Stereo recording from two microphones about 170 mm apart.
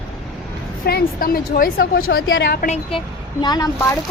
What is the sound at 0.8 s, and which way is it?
A woman's voice, 60° left (ahead or behind).